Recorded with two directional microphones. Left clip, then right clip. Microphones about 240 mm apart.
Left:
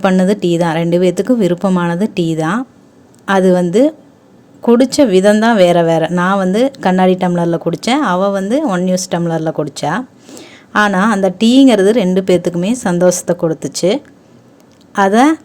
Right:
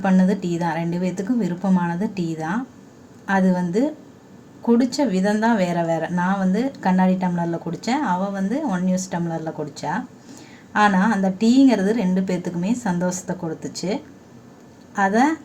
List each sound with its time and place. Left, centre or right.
0.0 s a woman's voice: left